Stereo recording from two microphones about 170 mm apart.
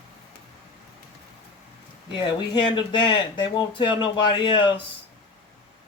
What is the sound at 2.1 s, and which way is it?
Speech, 25° left (ahead or behind).